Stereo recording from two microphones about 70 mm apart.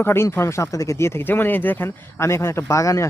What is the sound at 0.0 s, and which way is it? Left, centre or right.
Speech, left.